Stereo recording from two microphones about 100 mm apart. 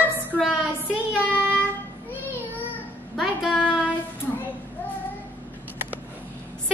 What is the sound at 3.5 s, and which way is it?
Child singing, 15° left (ahead or behind).